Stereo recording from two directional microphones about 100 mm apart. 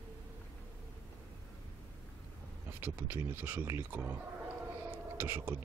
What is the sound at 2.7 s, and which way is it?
Speech, 20° right (ahead or behind).